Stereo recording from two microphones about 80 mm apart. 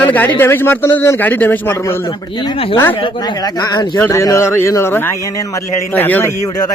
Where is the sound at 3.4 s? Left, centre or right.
Left.